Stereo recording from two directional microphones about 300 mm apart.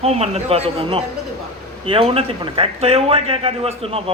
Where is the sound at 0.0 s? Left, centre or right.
Right.